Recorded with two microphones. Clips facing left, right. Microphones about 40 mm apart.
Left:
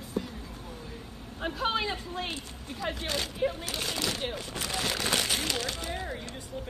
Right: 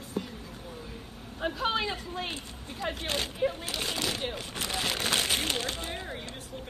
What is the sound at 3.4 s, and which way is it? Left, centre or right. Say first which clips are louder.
Speech: even; centre.